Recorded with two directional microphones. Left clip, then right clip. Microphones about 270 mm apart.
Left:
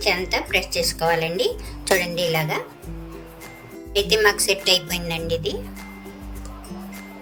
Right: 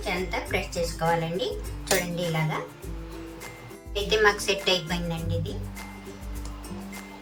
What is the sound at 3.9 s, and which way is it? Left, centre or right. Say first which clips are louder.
A woman's voice: left 4 dB; left.